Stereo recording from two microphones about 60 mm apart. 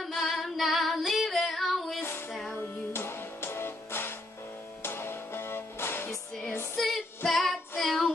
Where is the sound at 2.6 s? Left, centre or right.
Left.